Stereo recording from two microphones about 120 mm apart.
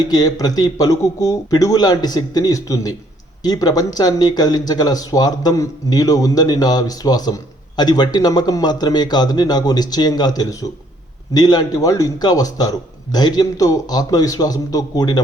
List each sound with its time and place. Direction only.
0.0 s speech: 35° left (ahead or behind)